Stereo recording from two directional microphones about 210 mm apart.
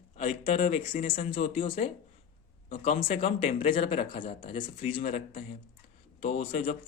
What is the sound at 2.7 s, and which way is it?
A man's voice, 30° left (ahead or behind).